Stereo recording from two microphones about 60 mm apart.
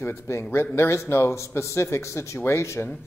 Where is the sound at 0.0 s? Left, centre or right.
Left.